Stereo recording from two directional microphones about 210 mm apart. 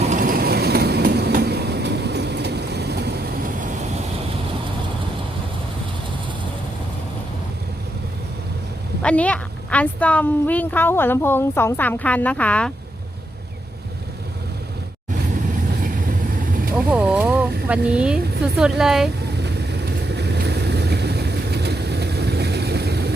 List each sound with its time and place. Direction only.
0.1 s train: 40° right (ahead or behind)
9.0 s a woman's voice: 5° left (ahead or behind)
16.7 s vehicle: 5° right (ahead or behind)
20.1 s vehicle: 50° right (ahead or behind)